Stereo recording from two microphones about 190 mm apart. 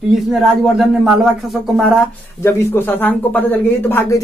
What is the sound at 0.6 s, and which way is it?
Speech, centre (ahead or behind).